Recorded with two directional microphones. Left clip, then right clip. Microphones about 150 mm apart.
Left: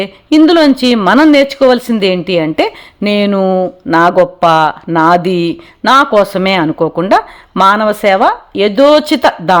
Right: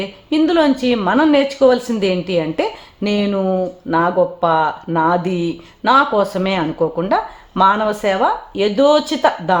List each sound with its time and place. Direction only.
0.0 s a woman's voice: 40° left (ahead or behind)